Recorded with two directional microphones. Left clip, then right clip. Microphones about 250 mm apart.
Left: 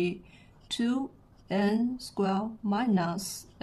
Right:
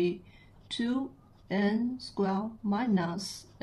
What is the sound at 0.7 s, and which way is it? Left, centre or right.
Speech, centre.